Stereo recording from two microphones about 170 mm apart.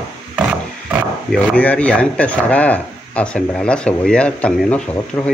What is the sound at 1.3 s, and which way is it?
Speech, 10° left (ahead or behind).